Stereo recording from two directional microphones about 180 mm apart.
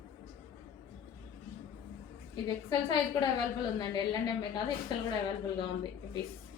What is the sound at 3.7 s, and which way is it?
A woman's voice, 20° left (ahead or behind).